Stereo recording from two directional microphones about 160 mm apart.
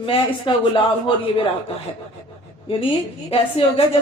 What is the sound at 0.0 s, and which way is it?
Speech, 30° left (ahead or behind).